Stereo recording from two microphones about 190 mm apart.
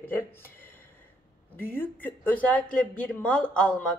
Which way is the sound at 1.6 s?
10° left (ahead or behind).